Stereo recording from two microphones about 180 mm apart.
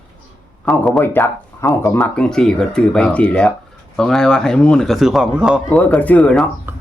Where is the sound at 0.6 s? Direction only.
5° left (ahead or behind).